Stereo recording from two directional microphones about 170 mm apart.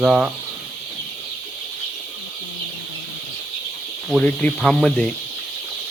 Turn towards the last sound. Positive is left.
turn(degrees=5)  # may be behind; listen again after turning